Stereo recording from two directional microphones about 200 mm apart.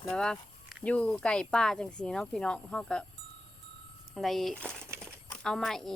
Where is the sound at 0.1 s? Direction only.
5° left (ahead or behind).